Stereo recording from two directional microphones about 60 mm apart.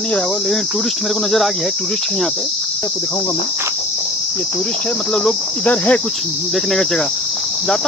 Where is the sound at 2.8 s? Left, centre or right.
Left.